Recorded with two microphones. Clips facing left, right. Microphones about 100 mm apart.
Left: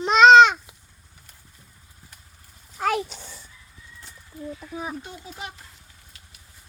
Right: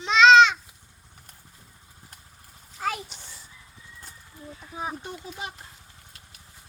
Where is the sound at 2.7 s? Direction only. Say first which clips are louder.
Left 6 dB; 70° left (ahead or behind).